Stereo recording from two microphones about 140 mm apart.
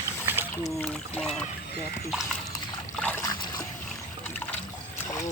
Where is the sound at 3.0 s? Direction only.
10° left (ahead or behind).